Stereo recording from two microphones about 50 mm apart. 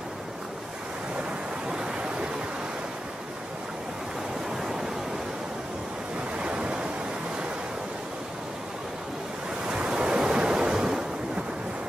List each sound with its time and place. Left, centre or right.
1.7 s waves: centre
4.6 s waves: centre
6.3 s waves: right
9.7 s waves: centre